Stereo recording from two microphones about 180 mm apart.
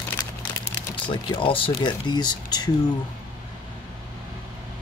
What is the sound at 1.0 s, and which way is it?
Speech, 30° left (ahead or behind).